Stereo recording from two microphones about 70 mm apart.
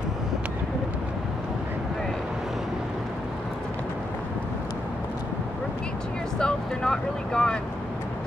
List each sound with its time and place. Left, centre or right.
6.3 s speech: centre